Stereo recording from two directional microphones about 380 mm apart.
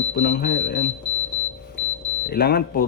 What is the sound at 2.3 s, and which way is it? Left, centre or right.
Speech, left.